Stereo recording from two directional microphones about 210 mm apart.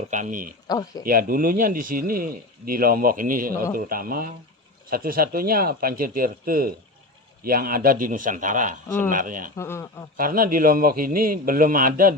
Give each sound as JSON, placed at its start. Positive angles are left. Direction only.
{"t": 0.1, "sound": "a man's voice", "side_deg": -40}
{"t": 0.7, "sound": "speech", "side_deg": 15}
{"t": 1.0, "sound": "a man's voice", "side_deg": -45}
{"t": 9.6, "sound": "speech", "side_deg": 15}
{"t": 10.2, "sound": "speech", "side_deg": -40}